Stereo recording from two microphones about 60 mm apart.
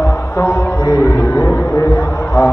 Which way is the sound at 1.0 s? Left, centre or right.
Left.